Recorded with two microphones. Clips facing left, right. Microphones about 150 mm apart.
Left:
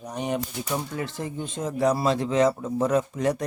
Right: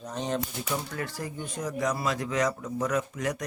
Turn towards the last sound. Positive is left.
turn(degrees=30)  # may be behind; listen again after turning